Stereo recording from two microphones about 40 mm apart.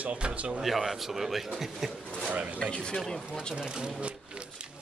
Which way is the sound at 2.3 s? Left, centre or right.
Right.